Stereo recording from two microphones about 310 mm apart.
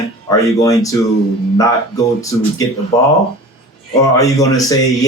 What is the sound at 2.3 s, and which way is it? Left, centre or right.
Speech, centre.